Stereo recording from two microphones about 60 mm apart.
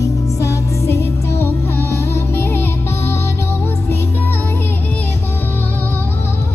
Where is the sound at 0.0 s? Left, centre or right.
Left.